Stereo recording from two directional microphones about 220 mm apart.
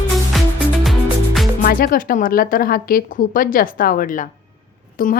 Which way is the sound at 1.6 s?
40° left (ahead or behind).